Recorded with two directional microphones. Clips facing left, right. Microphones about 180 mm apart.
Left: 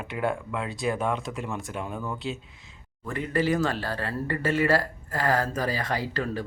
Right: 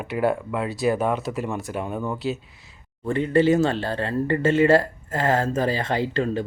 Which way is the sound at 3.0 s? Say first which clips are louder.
Right 8 dB; 30° right (ahead or behind).